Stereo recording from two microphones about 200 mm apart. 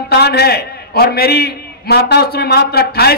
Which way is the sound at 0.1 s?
55° left (ahead or behind).